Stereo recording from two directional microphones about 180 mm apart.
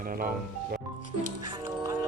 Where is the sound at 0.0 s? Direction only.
55° right (ahead or behind).